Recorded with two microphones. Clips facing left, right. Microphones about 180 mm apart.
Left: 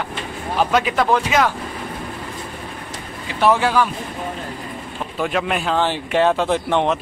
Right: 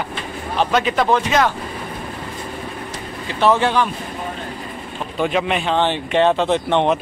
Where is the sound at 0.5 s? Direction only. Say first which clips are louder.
Even; 5° left (ahead or behind).